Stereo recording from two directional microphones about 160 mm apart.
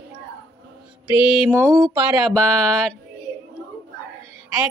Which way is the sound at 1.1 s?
5° right (ahead or behind).